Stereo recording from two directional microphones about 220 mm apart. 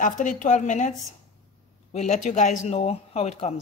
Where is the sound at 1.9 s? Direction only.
30° left (ahead or behind).